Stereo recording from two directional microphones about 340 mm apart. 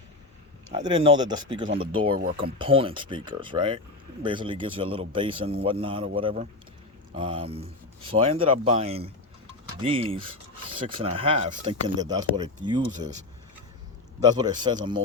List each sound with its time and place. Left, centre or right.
0.7 s speech: centre
14.3 s speech: centre